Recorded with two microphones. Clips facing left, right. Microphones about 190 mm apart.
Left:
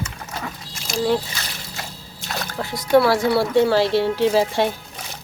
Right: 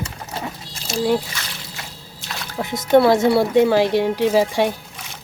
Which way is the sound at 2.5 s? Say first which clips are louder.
Right 2 dB; 20° right (ahead or behind).